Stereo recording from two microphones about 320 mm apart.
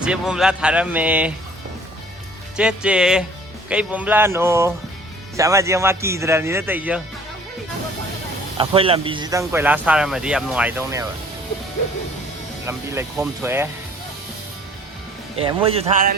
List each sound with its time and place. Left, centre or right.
0.0 s speech: centre
2.6 s speech: centre
8.5 s speech: centre
12.6 s speech: centre
15.4 s speech: centre